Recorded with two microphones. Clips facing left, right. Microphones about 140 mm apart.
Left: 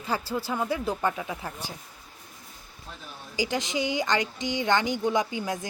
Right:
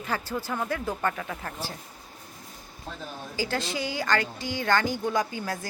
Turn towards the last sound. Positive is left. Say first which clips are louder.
# left 1 dB
turn(degrees=20)  # may be behind; listen again after turning